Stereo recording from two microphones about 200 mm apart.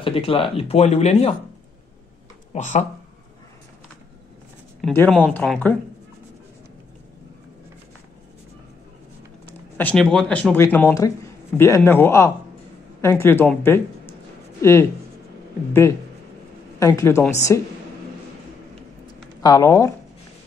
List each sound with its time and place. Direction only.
0.0 s speech: 25° left (ahead or behind)
2.5 s speech: 35° left (ahead or behind)
4.9 s speech: 5° left (ahead or behind)
9.5 s speech: 10° left (ahead or behind)
16.8 s speech: 15° left (ahead or behind)
19.0 s a sound: 20° left (ahead or behind)